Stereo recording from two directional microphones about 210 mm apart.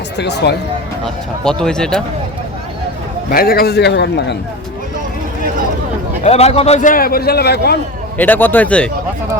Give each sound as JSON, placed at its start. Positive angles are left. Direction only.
{"t": 0.2, "sound": "a man's voice", "side_deg": 55}
{"t": 1.0, "sound": "speech", "side_deg": 5}
{"t": 3.3, "sound": "a man's voice", "side_deg": 45}
{"t": 6.2, "sound": "a man's voice", "side_deg": 30}
{"t": 8.2, "sound": "a man's voice", "side_deg": 10}